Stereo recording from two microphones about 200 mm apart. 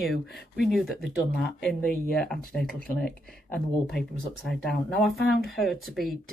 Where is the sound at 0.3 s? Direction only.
50° left (ahead or behind).